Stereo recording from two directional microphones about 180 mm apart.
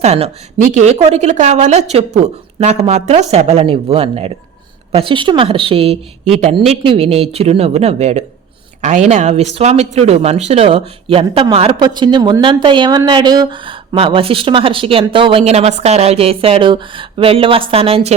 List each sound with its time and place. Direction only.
0.0 s speech: 35° right (ahead or behind)